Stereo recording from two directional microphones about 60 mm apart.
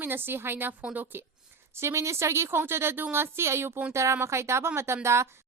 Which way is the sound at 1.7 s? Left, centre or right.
Right.